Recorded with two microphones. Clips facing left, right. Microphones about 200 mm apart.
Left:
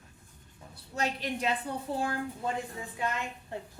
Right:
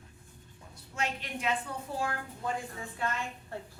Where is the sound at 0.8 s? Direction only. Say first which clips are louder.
Left 3 dB; 40° left (ahead or behind).